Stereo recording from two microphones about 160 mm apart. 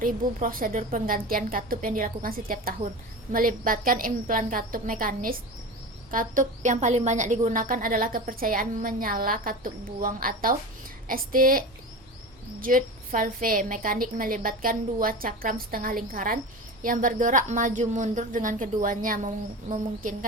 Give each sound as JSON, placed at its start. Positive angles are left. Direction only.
{"t": 0.0, "sound": "a woman's voice", "side_deg": -60}